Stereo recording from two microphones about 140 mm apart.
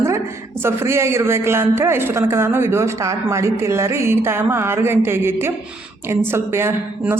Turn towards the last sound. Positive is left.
turn(degrees=-15)  # may be behind; listen again after turning